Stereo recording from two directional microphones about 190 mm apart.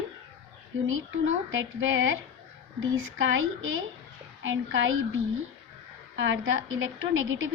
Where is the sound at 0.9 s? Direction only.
90° right.